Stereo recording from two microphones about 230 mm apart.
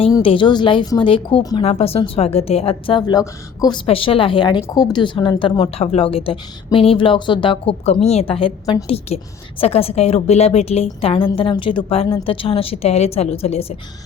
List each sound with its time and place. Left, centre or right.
0.0 s a woman's voice: left